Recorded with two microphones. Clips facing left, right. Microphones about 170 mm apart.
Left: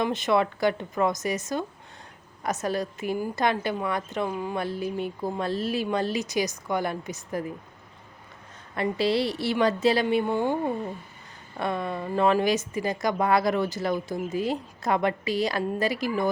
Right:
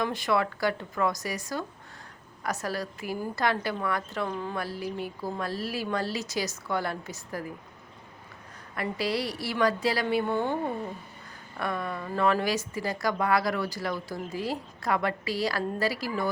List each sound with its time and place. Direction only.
0.0 s speech: 20° left (ahead or behind)
8.7 s speech: 25° left (ahead or behind)